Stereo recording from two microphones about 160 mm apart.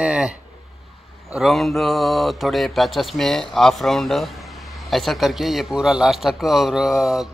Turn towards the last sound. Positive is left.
turn(degrees=0)  # may be behind; listen again after turning